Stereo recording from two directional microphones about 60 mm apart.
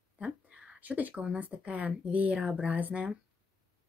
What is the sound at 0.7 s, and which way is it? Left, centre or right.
Speech, right.